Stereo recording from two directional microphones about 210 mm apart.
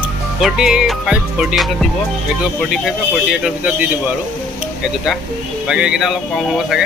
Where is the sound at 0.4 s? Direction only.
5° right (ahead or behind).